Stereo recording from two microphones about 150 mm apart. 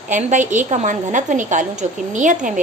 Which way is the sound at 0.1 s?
55° right (ahead or behind).